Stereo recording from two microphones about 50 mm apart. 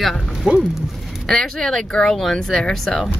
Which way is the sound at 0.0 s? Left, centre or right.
Centre.